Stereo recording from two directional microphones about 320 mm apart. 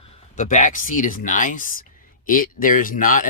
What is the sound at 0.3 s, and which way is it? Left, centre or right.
Speech, left.